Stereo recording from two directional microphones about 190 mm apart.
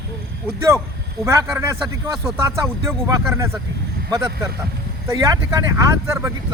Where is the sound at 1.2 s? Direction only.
15° right (ahead or behind).